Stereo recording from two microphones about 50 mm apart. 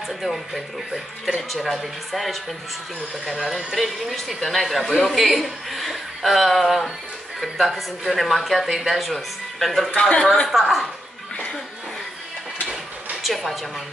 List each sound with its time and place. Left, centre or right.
0.9 s a woman's voice: centre
9.9 s speech: centre
10.5 s a woman's voice: centre
13.1 s a sound: centre